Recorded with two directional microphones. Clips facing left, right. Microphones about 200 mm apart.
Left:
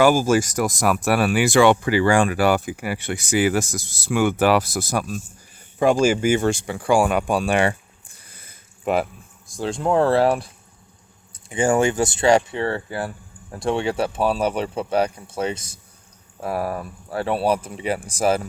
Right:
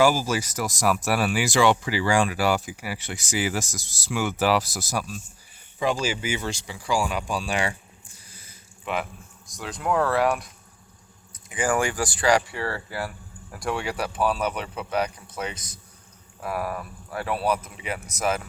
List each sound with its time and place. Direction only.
0.0 s speech: 50° left (ahead or behind)
9.6 s speech: 30° left (ahead or behind)